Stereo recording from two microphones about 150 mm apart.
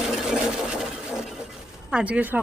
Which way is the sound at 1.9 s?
10° right (ahead or behind).